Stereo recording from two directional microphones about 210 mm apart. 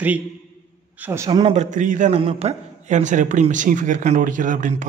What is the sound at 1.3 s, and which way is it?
A man's voice, 25° right (ahead or behind).